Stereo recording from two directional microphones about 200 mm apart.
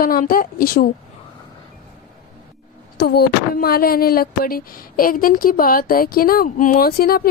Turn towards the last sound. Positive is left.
turn(degrees=50)  # may be behind; listen again after turning